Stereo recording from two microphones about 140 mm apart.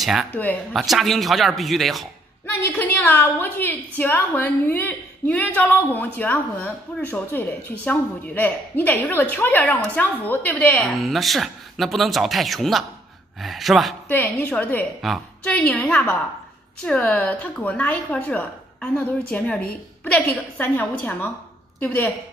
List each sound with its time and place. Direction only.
0.0 s speech: 5° right (ahead or behind)
0.3 s a woman's voice: 10° left (ahead or behind)
0.7 s speech: centre (ahead or behind)
2.4 s a woman's voice: 10° left (ahead or behind)
14.0 s a woman's voice: 15° left (ahead or behind)
15.0 s a woman's voice: centre (ahead or behind)
15.5 s a woman's voice: 10° left (ahead or behind)